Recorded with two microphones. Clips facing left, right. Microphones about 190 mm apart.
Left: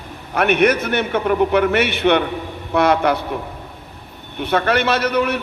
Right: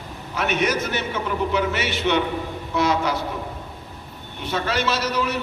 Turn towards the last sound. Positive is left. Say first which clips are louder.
# left 5 dB
turn(degrees=60)  # may be behind; listen again after turning